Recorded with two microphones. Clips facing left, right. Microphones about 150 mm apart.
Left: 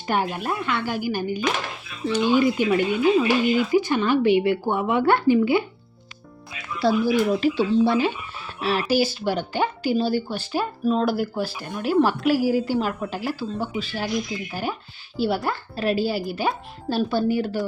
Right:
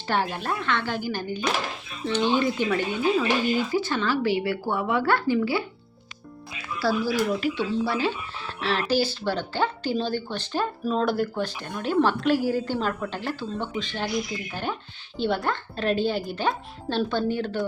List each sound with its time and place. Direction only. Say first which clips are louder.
0.1 s speech: left 2 dB; 15° left (ahead or behind)
6.7 s speech: left 4 dB; 20° left (ahead or behind)